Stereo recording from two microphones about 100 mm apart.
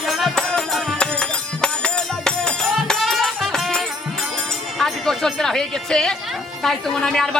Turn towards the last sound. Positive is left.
turn(degrees=5)  # may be behind; listen again after turning